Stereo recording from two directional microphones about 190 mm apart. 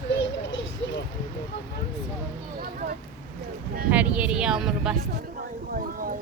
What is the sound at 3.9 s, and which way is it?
Speech, 10° right (ahead or behind).